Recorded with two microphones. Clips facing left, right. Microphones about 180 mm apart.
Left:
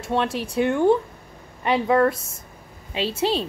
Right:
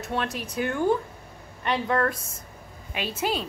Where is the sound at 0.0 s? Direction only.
25° left (ahead or behind).